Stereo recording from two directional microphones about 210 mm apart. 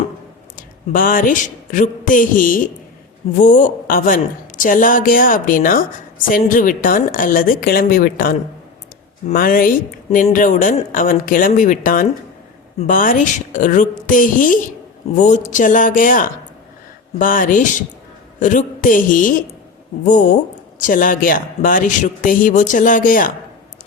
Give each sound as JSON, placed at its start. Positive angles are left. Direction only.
{"t": 0.5, "sound": "a woman's voice", "side_deg": 40}